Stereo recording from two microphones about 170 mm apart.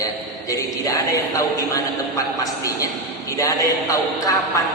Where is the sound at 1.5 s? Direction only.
20° left (ahead or behind).